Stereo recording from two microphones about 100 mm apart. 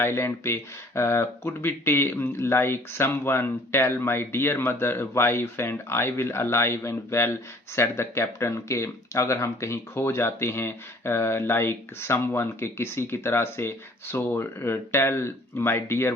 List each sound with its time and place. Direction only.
0.0 s speech: 25° left (ahead or behind)